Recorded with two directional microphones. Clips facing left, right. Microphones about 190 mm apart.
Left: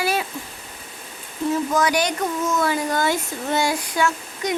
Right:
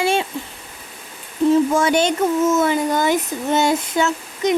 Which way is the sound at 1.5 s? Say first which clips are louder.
Right 4 dB; 25° right (ahead or behind).